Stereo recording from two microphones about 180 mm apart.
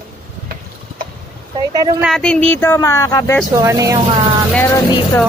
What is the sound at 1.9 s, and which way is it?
A woman's voice, centre (ahead or behind).